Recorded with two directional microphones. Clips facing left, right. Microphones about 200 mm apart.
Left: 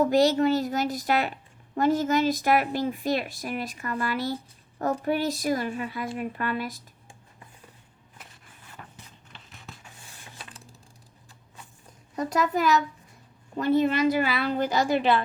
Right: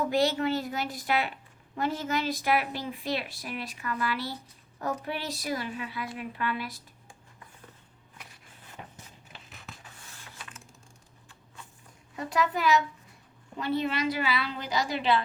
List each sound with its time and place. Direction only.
0.0 s a woman's voice: 40° left (ahead or behind)
12.1 s a woman's voice: 40° left (ahead or behind)